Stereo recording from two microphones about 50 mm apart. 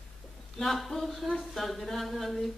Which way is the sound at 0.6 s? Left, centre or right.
Centre.